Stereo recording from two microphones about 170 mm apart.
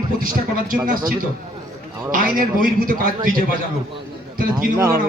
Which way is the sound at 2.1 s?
55° right (ahead or behind).